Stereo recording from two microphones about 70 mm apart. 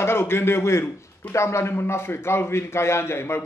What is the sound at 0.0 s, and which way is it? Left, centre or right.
A man's voice, left.